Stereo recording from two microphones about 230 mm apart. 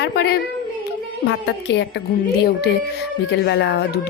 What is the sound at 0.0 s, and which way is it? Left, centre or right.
Speech, left.